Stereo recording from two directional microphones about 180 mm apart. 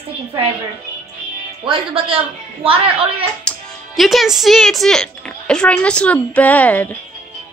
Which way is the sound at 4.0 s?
Centre (ahead or behind).